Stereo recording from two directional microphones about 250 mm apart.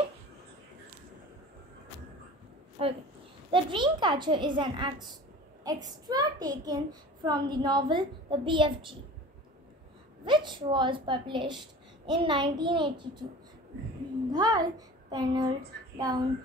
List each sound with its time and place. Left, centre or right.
2.8 s a woman's voice: right
10.2 s a child's voice: centre
14.3 s a child's voice: centre